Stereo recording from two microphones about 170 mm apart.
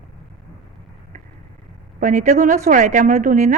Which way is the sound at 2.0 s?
50° right (ahead or behind).